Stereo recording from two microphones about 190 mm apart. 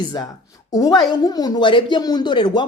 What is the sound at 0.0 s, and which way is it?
Speech, 20° left (ahead or behind).